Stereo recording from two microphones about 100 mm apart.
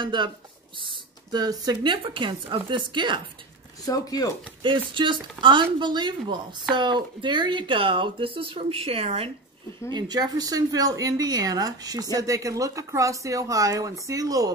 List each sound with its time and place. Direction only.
0.0 s a woman's voice: 55° right (ahead or behind)
0.7 s a sound: 55° right (ahead or behind)
1.4 s a woman's voice: 40° right (ahead or behind)
3.8 s speech: 40° left (ahead or behind)
4.6 s a woman's voice: 55° right (ahead or behind); by 9.3 s 80° right
9.8 s speech: 45° right (ahead or behind)